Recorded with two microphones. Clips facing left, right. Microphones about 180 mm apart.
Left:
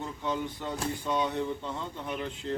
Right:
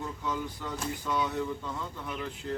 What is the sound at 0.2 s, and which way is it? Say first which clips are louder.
Speech: left 5 dB; 25° left (ahead or behind).